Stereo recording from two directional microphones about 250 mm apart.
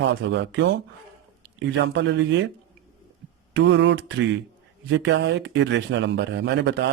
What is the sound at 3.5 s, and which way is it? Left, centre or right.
Speech, right.